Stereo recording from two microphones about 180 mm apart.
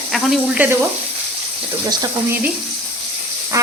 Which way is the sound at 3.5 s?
20° right (ahead or behind).